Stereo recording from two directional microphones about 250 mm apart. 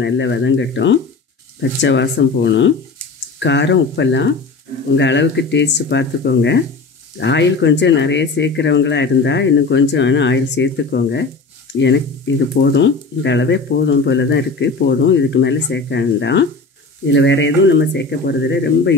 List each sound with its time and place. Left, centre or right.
0.0 s speech: left
12.5 s speech: left